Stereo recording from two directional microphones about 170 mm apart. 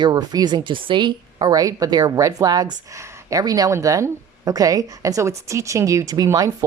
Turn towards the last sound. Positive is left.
turn(degrees=-20)  # may be behind; listen again after turning